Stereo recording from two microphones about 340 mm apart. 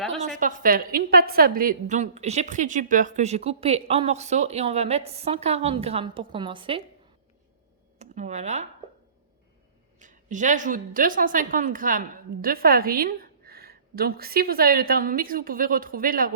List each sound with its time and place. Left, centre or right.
0.3 s a woman's voice: right
7.9 s speech: centre
10.0 s a woman's voice: right